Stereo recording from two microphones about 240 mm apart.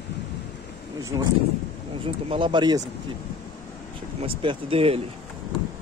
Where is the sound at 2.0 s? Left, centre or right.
Right.